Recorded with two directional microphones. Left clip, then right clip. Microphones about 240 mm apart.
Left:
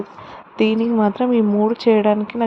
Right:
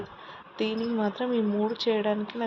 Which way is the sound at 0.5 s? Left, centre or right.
Left.